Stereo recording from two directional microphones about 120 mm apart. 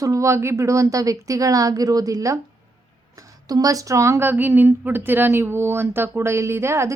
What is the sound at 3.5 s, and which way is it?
A woman's voice, 30° right (ahead or behind).